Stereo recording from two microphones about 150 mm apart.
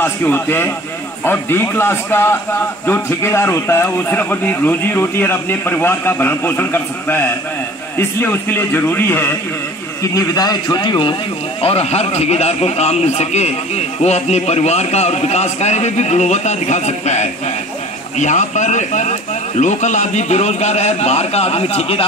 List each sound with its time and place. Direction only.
0.0 s speech: 15° left (ahead or behind)
10.1 s speech: 25° left (ahead or behind)
11.6 s speech: 45° left (ahead or behind)